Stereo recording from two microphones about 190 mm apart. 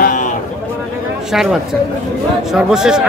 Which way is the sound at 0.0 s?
40° left (ahead or behind).